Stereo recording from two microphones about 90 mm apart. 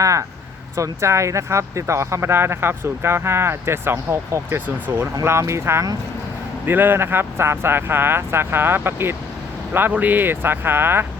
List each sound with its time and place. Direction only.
0.0 s speech: 40° right (ahead or behind)